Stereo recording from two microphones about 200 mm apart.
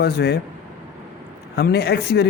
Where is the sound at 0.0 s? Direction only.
55° left (ahead or behind).